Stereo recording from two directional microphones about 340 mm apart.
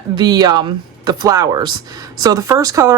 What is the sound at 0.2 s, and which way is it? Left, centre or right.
Speech, centre.